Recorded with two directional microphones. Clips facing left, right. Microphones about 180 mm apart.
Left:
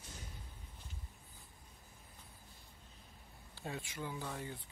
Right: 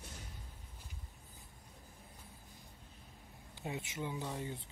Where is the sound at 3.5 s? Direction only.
20° right (ahead or behind).